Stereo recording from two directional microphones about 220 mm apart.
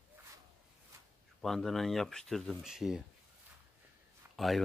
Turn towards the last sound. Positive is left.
turn(degrees=0)  # may be behind; listen again after turning